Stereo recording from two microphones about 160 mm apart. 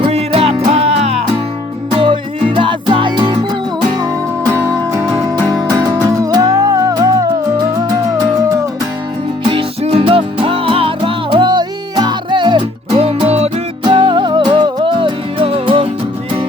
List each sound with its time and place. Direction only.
0.0 s music: 40° right (ahead or behind); by 8.6 s 20° right (ahead or behind)
9.5 s music: 35° right (ahead or behind)